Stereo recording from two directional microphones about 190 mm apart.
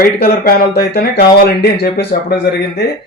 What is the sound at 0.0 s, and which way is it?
Speech, 50° left (ahead or behind).